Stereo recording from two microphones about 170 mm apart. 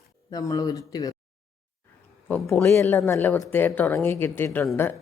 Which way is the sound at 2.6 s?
15° left (ahead or behind).